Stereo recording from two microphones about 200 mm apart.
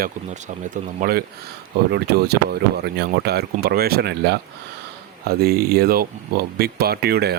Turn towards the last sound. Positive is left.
turn(degrees=-55)  # may be behind; listen again after turning